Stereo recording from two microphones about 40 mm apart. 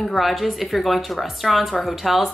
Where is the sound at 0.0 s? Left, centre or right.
Centre.